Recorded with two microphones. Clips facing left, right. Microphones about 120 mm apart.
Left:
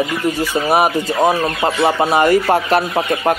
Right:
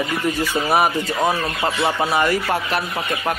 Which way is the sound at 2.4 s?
35° left (ahead or behind).